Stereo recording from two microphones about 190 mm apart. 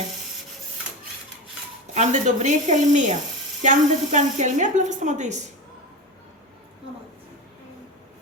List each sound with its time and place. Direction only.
1.9 s a woman's voice: 40° right (ahead or behind)